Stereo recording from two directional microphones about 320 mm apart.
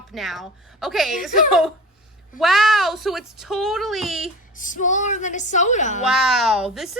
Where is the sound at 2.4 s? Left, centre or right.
Centre.